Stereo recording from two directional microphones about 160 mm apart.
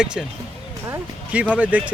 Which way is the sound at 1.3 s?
10° right (ahead or behind).